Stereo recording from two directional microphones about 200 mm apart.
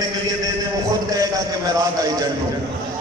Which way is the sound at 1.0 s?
15° right (ahead or behind).